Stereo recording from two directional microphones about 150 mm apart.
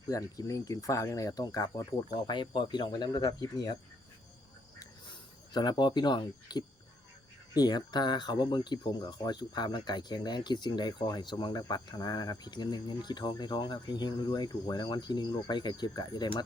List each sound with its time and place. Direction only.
0.1 s speech: 20° left (ahead or behind)
5.5 s speech: 30° left (ahead or behind)